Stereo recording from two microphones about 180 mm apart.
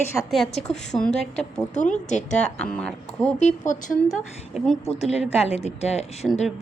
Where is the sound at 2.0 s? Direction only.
40° left (ahead or behind).